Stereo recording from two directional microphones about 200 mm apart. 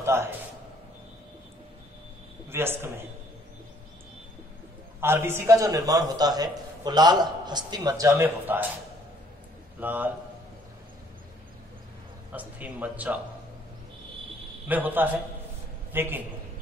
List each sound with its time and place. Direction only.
0.0 s a sound: 15° right (ahead or behind)
2.5 s speech: 10° right (ahead or behind)
5.0 s a man's voice: 10° right (ahead or behind)
9.8 s speech: 10° right (ahead or behind)
12.3 s speech: 10° right (ahead or behind)
14.7 s speech: 10° right (ahead or behind)